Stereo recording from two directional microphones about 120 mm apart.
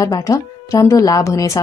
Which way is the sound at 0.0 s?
30° left (ahead or behind).